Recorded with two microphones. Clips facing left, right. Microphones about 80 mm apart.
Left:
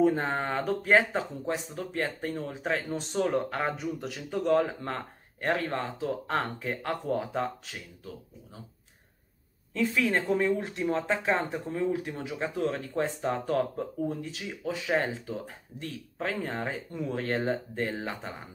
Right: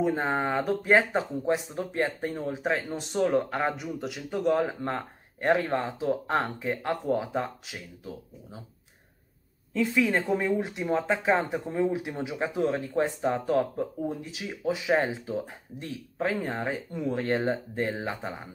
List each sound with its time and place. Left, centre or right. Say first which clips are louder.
0.0 s speech: left 1 dB; centre
1.5 s speech: right 5 dB; centre
2.5 s speech: right 1 dB; centre
4.8 s speech: right 3 dB; centre
9.8 s speech: right 2 dB; centre